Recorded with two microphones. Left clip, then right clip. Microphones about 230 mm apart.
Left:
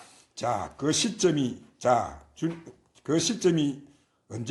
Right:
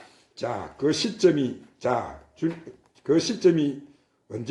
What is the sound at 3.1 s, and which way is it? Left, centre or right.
Speech, left.